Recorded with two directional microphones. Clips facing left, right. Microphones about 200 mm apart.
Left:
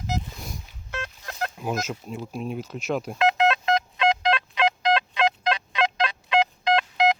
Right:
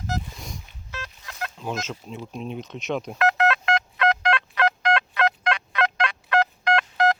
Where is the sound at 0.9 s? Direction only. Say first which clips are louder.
Left 5 dB; 50° left (ahead or behind).